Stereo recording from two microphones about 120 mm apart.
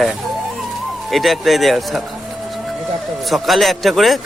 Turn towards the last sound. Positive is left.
turn(degrees=0)  # may be behind; listen again after turning